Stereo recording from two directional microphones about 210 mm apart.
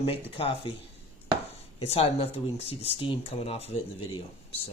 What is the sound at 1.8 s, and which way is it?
Speech, 30° left (ahead or behind).